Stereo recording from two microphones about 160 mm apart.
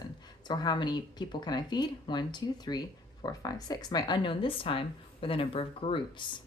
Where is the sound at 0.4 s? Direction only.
25° left (ahead or behind).